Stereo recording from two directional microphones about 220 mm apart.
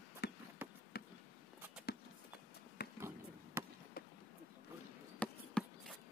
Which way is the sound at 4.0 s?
45° left (ahead or behind).